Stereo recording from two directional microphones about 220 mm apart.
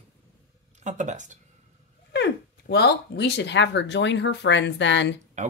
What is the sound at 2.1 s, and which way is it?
Speech, 50° left (ahead or behind).